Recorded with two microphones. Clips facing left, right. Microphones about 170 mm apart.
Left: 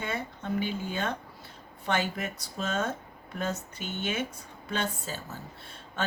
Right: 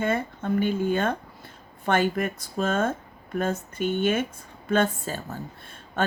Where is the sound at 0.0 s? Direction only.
50° right (ahead or behind).